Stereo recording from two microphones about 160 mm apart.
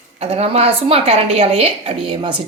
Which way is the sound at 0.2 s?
40° right (ahead or behind).